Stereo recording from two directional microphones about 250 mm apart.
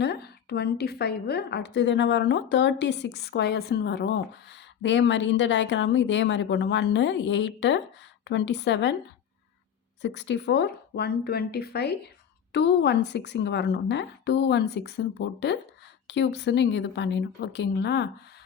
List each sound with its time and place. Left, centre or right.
0.0 s a woman's voice: left
10.0 s a woman's voice: left